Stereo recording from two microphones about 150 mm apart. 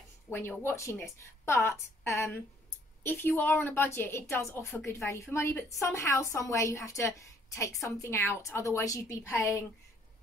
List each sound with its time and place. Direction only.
0.3 s a woman's voice: 15° left (ahead or behind)